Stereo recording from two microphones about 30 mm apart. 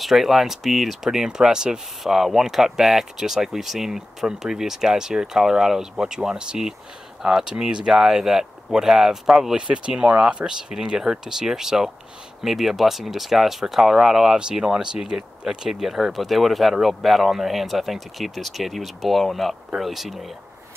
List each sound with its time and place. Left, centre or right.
0.0 s speech: centre
1.2 s speech: right
2.0 s speech: centre; by 8.0 s right
8.0 s speech: centre
9.6 s speech: right
12.4 s speech: centre; by 15.2 s right
15.4 s speech: centre
16.1 s speech: centre